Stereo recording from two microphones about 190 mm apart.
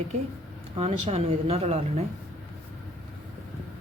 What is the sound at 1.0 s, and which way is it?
Speech, 30° right (ahead or behind).